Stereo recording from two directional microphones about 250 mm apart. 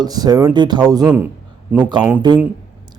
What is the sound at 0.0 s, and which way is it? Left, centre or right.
Speech, centre.